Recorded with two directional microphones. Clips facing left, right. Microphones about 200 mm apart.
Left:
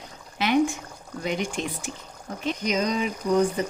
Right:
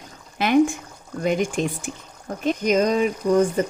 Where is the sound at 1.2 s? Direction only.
50° right (ahead or behind).